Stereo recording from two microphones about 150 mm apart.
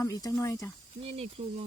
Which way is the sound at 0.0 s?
20° left (ahead or behind).